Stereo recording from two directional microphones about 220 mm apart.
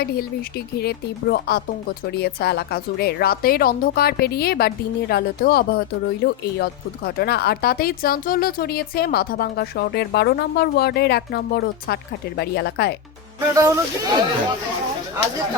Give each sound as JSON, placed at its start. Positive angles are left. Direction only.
{"t": 0.0, "sound": "speech", "side_deg": 45}
{"t": 13.5, "sound": "speech", "side_deg": -15}